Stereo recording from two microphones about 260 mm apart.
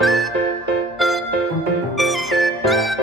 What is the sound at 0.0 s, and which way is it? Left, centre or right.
Music, centre.